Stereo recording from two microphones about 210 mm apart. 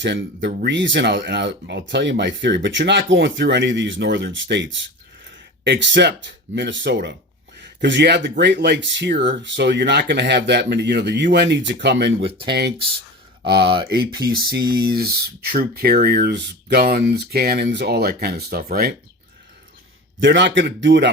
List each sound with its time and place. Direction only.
0.4 s speech: 55° right (ahead or behind)
12.2 s speech: 25° right (ahead or behind)
13.4 s speech: 50° right (ahead or behind)
20.1 s speech: 60° right (ahead or behind)